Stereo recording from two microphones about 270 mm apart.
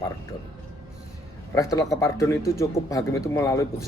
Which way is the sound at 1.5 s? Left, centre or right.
Centre.